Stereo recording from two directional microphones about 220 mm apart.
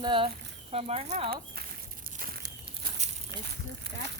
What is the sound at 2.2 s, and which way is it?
Crumpling, 40° right (ahead or behind).